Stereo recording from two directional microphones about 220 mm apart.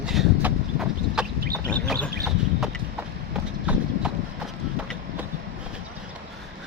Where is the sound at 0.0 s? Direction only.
5° right (ahead or behind).